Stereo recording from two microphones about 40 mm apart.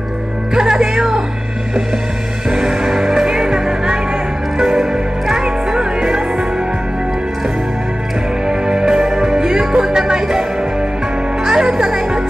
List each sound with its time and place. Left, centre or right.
0.6 s music: centre
2.5 s music: centre
8.5 s music: centre
11.4 s music: centre